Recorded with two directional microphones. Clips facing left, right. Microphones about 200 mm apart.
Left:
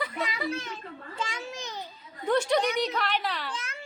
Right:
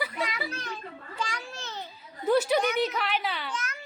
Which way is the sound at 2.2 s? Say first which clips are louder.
Right 1 dB; 5° right (ahead or behind).